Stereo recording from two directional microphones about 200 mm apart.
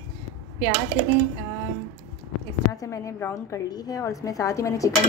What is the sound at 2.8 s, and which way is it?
Speech, 15° left (ahead or behind).